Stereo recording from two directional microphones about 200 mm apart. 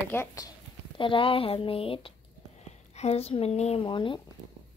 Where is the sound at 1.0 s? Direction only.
25° left (ahead or behind).